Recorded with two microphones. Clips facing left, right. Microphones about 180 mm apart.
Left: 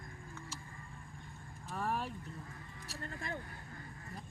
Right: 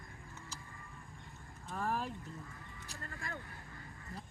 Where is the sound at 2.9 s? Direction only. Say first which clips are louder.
Left 4 dB; 25° left (ahead or behind).